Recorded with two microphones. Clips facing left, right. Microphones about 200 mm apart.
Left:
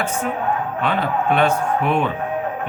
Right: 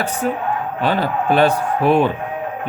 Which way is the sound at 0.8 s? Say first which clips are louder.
Right 4 dB; 35° right (ahead or behind).